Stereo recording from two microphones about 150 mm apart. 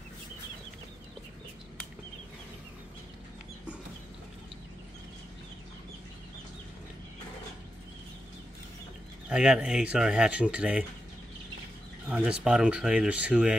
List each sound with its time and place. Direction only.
9.3 s speech: 5° right (ahead or behind)
12.1 s speech: 10° right (ahead or behind)